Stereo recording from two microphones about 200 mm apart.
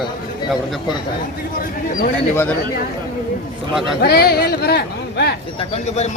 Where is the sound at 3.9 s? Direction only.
50° left (ahead or behind).